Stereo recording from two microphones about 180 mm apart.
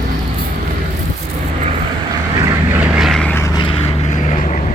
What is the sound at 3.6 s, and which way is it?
Vehicle, 30° left (ahead or behind).